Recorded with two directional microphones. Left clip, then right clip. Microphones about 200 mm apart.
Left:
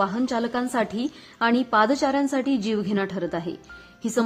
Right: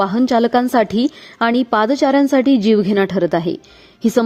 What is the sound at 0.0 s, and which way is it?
A woman's voice, 40° right (ahead or behind).